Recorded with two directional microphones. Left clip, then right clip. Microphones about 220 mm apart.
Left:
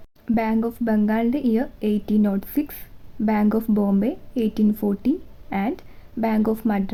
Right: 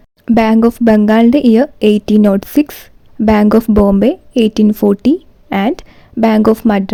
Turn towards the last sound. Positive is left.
turn(degrees=-40)  # may be behind; listen again after turning